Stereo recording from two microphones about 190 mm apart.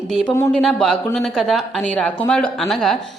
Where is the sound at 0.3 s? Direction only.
15° left (ahead or behind).